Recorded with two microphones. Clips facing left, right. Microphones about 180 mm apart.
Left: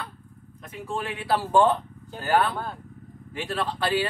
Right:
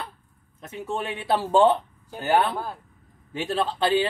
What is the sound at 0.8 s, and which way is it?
Speech, 25° right (ahead or behind).